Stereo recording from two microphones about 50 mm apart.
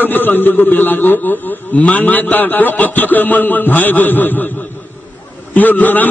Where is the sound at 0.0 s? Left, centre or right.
Left.